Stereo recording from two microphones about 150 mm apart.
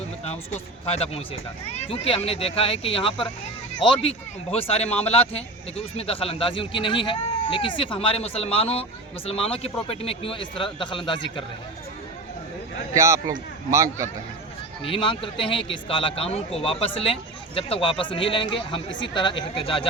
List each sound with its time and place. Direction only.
0.3 s speech: 45° left (ahead or behind)
12.9 s speech: 20° right (ahead or behind)
14.8 s speech: 35° left (ahead or behind)